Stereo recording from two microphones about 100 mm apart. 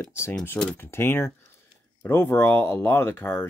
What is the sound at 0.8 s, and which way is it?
Speech, 25° left (ahead or behind).